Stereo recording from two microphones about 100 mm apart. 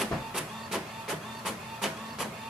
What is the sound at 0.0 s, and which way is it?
Printer, 5° right (ahead or behind).